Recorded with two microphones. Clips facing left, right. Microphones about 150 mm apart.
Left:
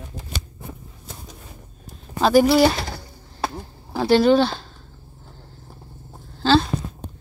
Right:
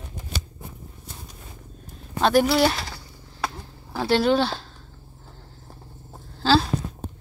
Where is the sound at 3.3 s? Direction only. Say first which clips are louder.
Left 3 dB; 25° left (ahead or behind).